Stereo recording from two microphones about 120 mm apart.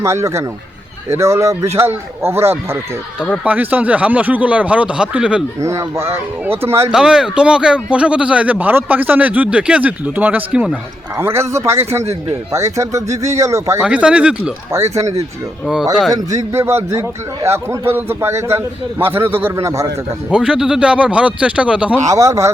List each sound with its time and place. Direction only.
0.0 s a man's voice: 25° right (ahead or behind); by 5.4 s 10° right (ahead or behind)
5.5 s a man's voice: 25° right (ahead or behind)
6.9 s a man's voice: 5° right (ahead or behind)
11.2 s a man's voice: 20° right (ahead or behind)
13.8 s a man's voice: 10° right (ahead or behind)
14.7 s a man's voice: 25° right (ahead or behind)
15.7 s speech: 5° right (ahead or behind)
16.5 s a man's voice: 20° right (ahead or behind)
20.3 s a man's voice: 10° right (ahead or behind)
22.1 s a man's voice: 25° right (ahead or behind)